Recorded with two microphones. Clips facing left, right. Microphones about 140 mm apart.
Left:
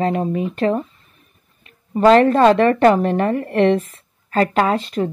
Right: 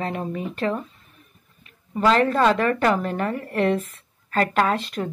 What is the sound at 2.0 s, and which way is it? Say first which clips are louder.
A woman's voice: left 7 dB; 40° left (ahead or behind).